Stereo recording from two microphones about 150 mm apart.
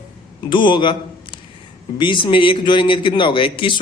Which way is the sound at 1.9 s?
30° left (ahead or behind).